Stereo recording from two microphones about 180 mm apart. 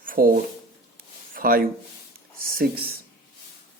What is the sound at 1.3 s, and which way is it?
Speech, 55° right (ahead or behind).